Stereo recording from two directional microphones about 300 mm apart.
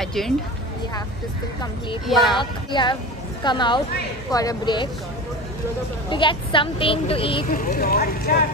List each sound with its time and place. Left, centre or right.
0.0 s a sound: centre
2.0 s speech: centre
2.3 s a woman's voice: centre
6.0 s a woman's voice: centre